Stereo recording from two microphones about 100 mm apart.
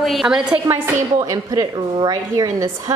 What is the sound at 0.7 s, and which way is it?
A woman's voice, 35° right (ahead or behind).